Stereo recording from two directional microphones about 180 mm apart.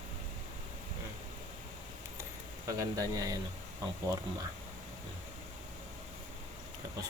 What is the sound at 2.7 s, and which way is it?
Speech, 20° right (ahead or behind).